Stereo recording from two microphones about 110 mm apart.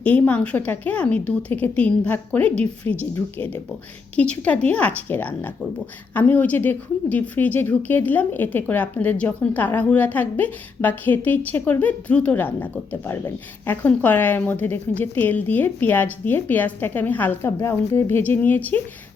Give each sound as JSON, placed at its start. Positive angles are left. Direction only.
{"t": 0.0, "sound": "a woman's voice", "side_deg": 15}
{"t": 4.1, "sound": "a woman's voice", "side_deg": 10}